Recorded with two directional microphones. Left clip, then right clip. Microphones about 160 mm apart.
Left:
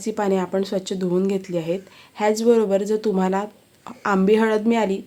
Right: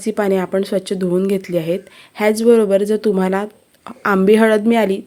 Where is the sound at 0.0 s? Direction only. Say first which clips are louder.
Right 5 dB; 30° right (ahead or behind).